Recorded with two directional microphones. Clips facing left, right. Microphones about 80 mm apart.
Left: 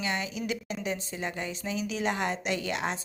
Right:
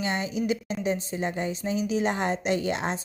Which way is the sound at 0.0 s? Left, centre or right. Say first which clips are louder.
Right 4 dB; right.